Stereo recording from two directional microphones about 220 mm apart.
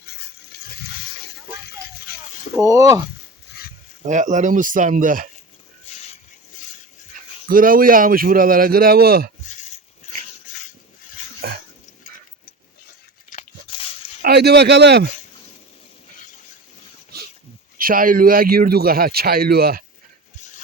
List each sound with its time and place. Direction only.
0.0 s dog: 45° left (ahead or behind)
1.2 s a sound: 45° left (ahead or behind)
2.6 s speech: 15° right (ahead or behind)
4.0 s a man's voice: 35° right (ahead or behind)
7.4 s a man's voice: 40° right (ahead or behind)
11.4 s dog: 45° right (ahead or behind)
13.3 s a sound: 25° left (ahead or behind)
14.2 s speech: 45° right (ahead or behind)
17.7 s speech: 40° right (ahead or behind)